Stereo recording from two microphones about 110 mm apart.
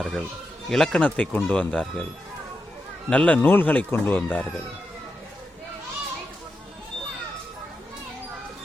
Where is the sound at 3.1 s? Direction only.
10° left (ahead or behind).